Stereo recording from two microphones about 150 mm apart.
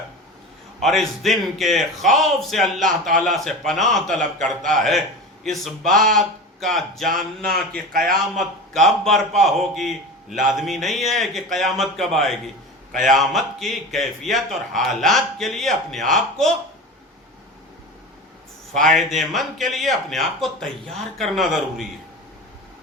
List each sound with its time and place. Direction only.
0.8 s a man's voice: centre (ahead or behind)
4.4 s a man's voice: 55° right (ahead or behind)
4.7 s a man's voice: centre (ahead or behind)
8.1 s a man's voice: centre (ahead or behind)
18.7 s a man's voice: centre (ahead or behind)